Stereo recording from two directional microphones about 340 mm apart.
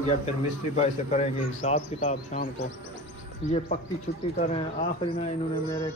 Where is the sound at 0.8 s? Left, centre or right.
Centre.